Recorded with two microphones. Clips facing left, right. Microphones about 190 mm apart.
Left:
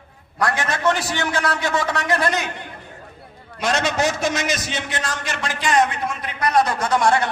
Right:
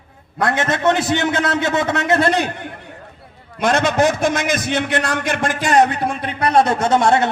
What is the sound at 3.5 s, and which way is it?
A man's voice, 55° right (ahead or behind).